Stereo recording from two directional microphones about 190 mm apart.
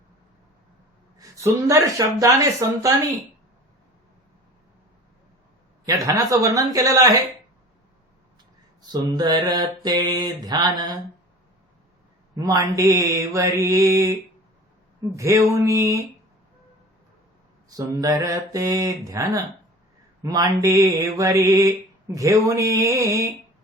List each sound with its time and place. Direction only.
1.2 s mantra: 15° right (ahead or behind)
5.8 s mantra: 20° right (ahead or behind)
8.8 s mantra: 20° right (ahead or behind)
12.4 s mantra: 20° right (ahead or behind)
17.7 s mantra: 20° right (ahead or behind)